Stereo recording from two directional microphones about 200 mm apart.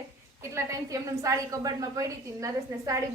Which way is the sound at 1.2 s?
15° right (ahead or behind).